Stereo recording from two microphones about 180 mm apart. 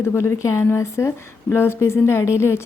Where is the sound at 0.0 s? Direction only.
15° left (ahead or behind).